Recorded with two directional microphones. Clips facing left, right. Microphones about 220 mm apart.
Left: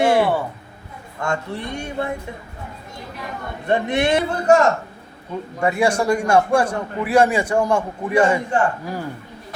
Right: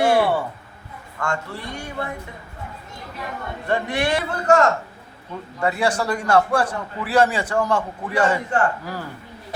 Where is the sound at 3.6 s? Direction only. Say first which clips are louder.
Left 4 dB; 20° left (ahead or behind).